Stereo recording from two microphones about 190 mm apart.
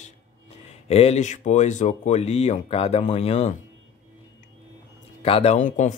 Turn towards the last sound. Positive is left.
turn(degrees=40)  # may be behind; listen again after turning